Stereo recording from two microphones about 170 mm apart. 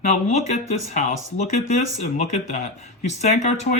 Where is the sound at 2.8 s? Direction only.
40° left (ahead or behind).